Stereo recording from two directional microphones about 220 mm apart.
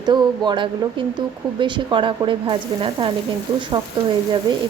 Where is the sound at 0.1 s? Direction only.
20° right (ahead or behind).